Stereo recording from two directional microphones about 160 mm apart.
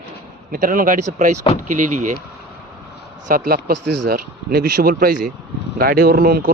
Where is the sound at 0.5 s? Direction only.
60° right (ahead or behind).